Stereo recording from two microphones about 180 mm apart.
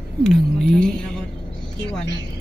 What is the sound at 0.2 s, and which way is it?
Speech, 5° left (ahead or behind).